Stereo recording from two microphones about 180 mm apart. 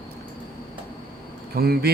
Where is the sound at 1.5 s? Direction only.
60° right (ahead or behind).